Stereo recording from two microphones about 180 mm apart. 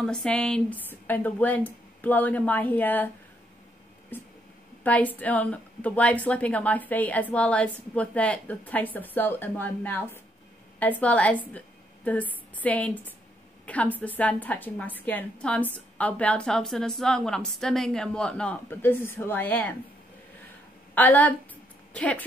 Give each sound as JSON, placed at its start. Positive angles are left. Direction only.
{"t": 0.0, "sound": "a woman's voice", "side_deg": 5}
{"t": 4.1, "sound": "a sound", "side_deg": 10}
{"t": 4.8, "sound": "a woman's voice", "side_deg": 10}
{"t": 20.9, "sound": "a woman's voice", "side_deg": 10}